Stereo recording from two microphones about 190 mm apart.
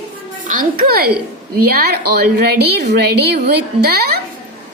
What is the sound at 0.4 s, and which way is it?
A child's voice, 45° right (ahead or behind).